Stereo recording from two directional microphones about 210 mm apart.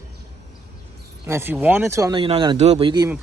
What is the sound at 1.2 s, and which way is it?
Speech, 10° right (ahead or behind).